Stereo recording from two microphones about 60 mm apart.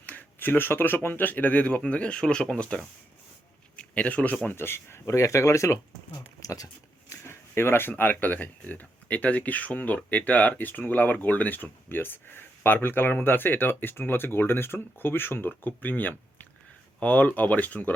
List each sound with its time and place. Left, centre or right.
0.0 s a man's voice: left
4.5 s speech: left
6.4 s a sound: left
7.1 s speech: left